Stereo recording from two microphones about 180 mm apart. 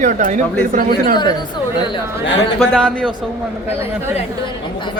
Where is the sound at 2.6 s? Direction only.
5° left (ahead or behind).